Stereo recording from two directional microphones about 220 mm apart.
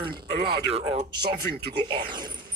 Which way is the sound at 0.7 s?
25° right (ahead or behind).